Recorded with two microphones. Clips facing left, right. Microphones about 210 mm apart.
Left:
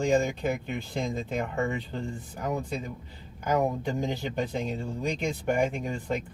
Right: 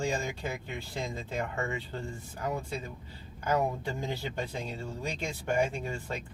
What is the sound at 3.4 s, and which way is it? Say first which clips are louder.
Speech: left 3 dB; 15° left (ahead or behind).